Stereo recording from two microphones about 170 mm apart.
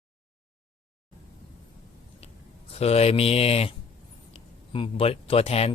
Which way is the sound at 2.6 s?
35° left (ahead or behind).